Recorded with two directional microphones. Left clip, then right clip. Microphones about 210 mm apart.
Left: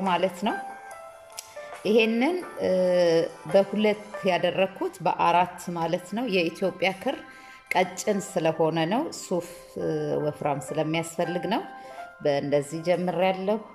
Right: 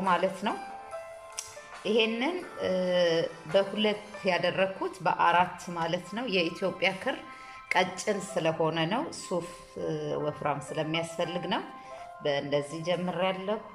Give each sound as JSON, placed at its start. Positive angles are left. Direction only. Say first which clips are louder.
{"t": 0.0, "sound": "a woman's voice", "louder": "left 2 dB", "side_deg": 15}
{"t": 1.8, "sound": "a woman's voice", "louder": "left 5 dB", "side_deg": 20}